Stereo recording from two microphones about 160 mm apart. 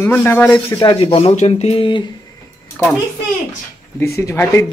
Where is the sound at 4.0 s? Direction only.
15° left (ahead or behind).